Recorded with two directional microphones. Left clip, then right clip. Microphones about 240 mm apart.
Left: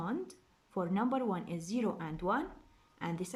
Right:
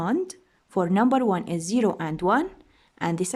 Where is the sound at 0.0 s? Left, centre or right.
Right.